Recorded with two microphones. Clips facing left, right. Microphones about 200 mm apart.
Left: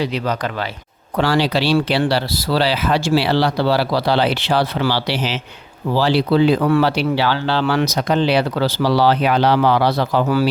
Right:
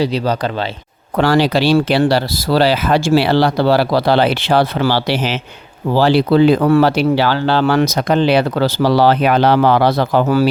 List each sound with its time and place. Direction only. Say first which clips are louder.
0.0 s speech: right 4 dB; 35° right (ahead or behind)
1.1 s speech: right 4 dB; 50° right (ahead or behind)